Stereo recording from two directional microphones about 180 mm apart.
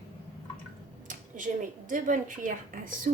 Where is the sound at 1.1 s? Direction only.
45° right (ahead or behind).